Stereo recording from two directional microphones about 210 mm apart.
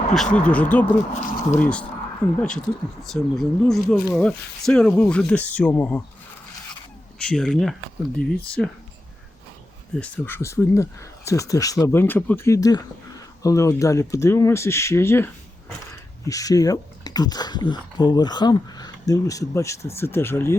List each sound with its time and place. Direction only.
0.1 s speech: 5° left (ahead or behind)
7.2 s speech: 5° left (ahead or behind)
10.0 s speech: 10° left (ahead or behind)